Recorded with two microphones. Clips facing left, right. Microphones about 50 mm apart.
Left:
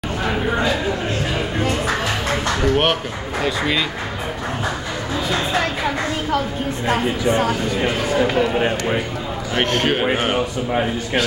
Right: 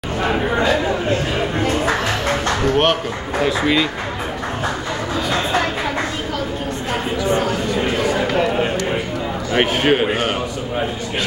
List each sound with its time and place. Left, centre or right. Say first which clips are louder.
2.6 s speech: right 1 dB; centre
6.9 s speech: left 1 dB; centre
9.5 s a man's voice: right 3 dB; centre
10.1 s speech: left 1 dB; centre